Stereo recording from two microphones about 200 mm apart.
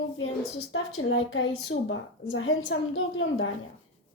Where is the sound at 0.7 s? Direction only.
80° left.